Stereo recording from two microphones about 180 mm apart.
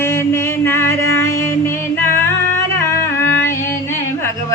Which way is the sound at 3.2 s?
15° left (ahead or behind).